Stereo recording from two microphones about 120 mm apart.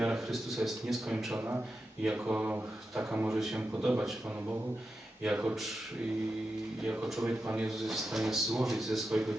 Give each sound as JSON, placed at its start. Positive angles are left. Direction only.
{"t": 0.0, "sound": "speech", "side_deg": -5}
{"t": 1.4, "sound": "a man's voice", "side_deg": -20}
{"t": 2.0, "sound": "a man's voice", "side_deg": -5}
{"t": 3.3, "sound": "speech", "side_deg": -5}
{"t": 5.2, "sound": "a man's voice", "side_deg": -10}
{"t": 6.8, "sound": "speech", "side_deg": -5}